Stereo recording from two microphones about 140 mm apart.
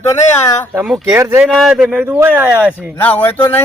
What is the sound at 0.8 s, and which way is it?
Speech, 10° right (ahead or behind).